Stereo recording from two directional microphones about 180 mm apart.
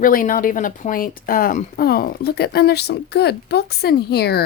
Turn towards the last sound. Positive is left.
turn(degrees=60)  # may be behind; listen again after turning